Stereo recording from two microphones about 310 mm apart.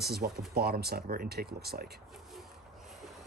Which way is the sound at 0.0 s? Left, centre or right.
Right.